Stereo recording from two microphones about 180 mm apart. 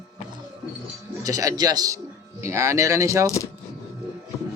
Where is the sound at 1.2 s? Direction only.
20° right (ahead or behind).